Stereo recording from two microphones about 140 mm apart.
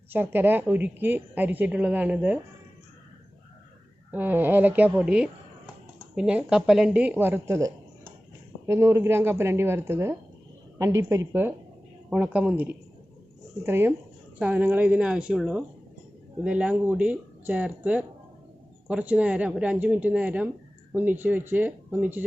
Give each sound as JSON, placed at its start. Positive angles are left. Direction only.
{"t": 0.1, "sound": "a woman's voice", "side_deg": -15}
{"t": 4.1, "sound": "a woman's voice", "side_deg": -15}